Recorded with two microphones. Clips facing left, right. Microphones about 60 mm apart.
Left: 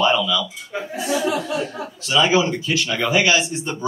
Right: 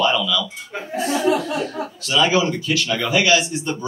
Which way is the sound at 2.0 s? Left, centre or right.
Left.